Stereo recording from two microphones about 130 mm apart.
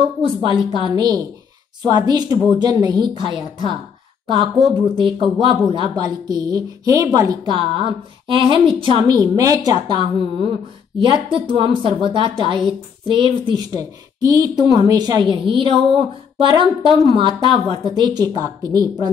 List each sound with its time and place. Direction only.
0.2 s a woman's voice: 45° right (ahead or behind)
4.9 s speech: 40° right (ahead or behind)
9.1 s a woman's voice: 30° right (ahead or behind)